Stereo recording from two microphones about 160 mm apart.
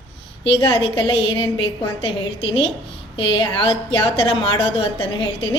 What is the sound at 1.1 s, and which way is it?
A woman's voice, 35° left (ahead or behind).